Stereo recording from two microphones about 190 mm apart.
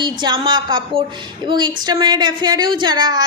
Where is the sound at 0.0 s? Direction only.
25° right (ahead or behind).